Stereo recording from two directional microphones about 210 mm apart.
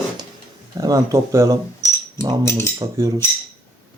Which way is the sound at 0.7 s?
15° right (ahead or behind).